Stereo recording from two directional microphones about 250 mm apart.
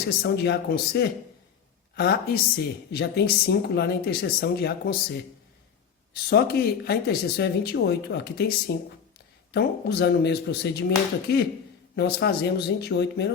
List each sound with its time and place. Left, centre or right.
0.2 s a woman's voice: left
6.2 s a woman's voice: left